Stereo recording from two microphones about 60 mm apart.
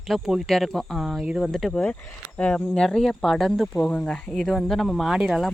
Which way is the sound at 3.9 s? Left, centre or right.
Left.